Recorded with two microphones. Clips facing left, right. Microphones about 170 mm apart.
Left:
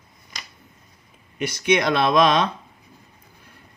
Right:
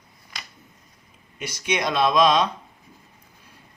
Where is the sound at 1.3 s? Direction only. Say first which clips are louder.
Left 6 dB; 60° left (ahead or behind).